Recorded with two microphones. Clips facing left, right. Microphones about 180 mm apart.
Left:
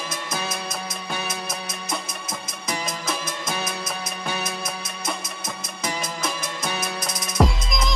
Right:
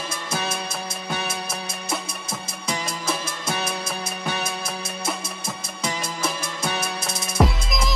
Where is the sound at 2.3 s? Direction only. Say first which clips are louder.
Right 1 dB; 30° right (ahead or behind).